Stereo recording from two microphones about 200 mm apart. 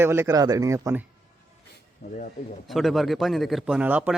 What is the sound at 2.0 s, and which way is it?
Speech, 50° left (ahead or behind).